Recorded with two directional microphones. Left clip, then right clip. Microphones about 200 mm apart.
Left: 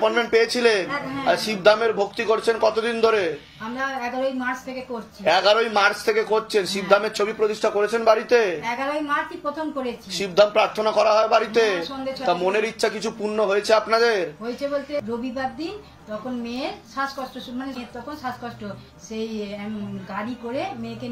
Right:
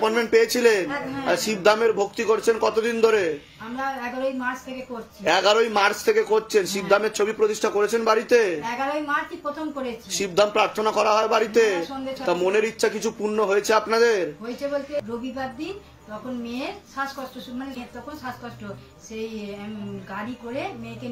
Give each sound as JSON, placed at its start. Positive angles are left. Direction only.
{"t": 0.0, "sound": "a man's voice", "side_deg": -45}
{"t": 3.7, "sound": "a woman's voice", "side_deg": -15}
{"t": 5.2, "sound": "a man's voice", "side_deg": -40}
{"t": 10.1, "sound": "a man's voice", "side_deg": -45}
{"t": 16.4, "sound": "a woman's voice", "side_deg": -15}